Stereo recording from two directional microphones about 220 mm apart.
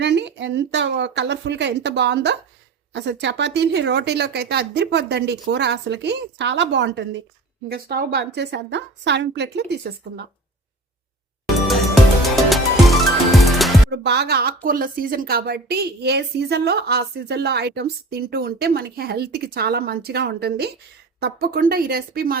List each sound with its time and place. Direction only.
0.0 s a woman's voice: 50° right (ahead or behind)
12.5 s music: centre (ahead or behind)
13.9 s a woman's voice: 50° right (ahead or behind)